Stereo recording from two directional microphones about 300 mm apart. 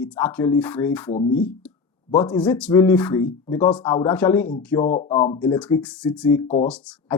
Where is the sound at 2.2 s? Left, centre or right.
Centre.